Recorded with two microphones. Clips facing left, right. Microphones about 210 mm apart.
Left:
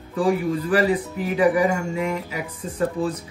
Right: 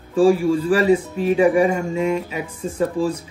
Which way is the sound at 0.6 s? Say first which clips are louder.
Right 4 dB; 25° right (ahead or behind).